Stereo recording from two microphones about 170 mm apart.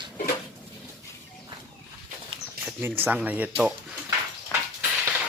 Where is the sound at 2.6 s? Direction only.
60° right (ahead or behind).